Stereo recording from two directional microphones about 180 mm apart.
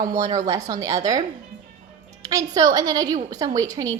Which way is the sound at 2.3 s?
20° right (ahead or behind).